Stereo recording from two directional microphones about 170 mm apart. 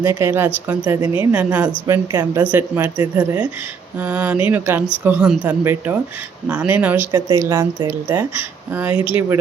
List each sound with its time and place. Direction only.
0.0 s a woman's voice: 15° right (ahead or behind)
7.1 s a woman's voice: 25° right (ahead or behind)
7.4 s a woman's voice: 15° right (ahead or behind)
8.7 s a woman's voice: 10° right (ahead or behind)